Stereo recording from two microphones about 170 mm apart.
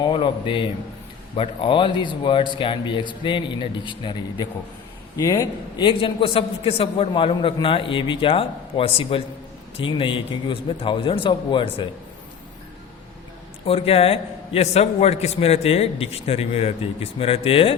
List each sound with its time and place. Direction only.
0.0 s a man's voice: 30° left (ahead or behind)
13.7 s a man's voice: 35° left (ahead or behind)